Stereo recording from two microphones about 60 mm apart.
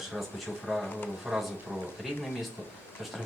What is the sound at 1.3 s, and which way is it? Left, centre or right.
Speech, centre.